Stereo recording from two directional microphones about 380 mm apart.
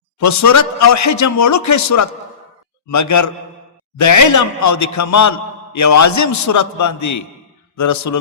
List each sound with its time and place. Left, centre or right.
0.2 s a man's voice: left